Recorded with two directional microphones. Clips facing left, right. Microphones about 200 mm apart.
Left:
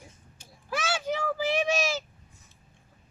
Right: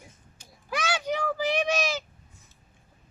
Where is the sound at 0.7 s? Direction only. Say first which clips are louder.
Right 1 dB; 5° left (ahead or behind).